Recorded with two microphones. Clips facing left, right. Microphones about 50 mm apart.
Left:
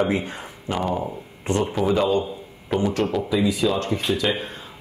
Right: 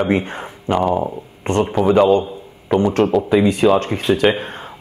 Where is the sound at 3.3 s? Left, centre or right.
Right.